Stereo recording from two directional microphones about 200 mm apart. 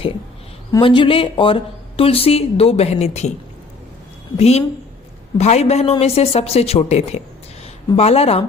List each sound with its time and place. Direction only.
0.7 s speech: 25° left (ahead or behind)
4.4 s speech: 30° left (ahead or behind)